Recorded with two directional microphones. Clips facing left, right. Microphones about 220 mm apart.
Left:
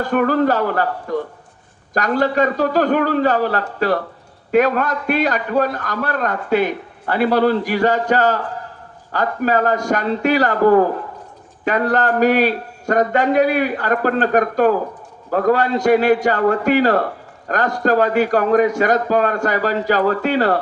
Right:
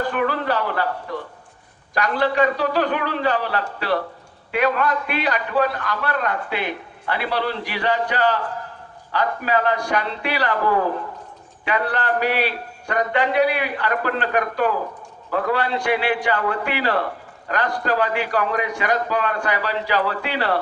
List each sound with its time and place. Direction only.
0.0 s a man's voice: 45° left (ahead or behind)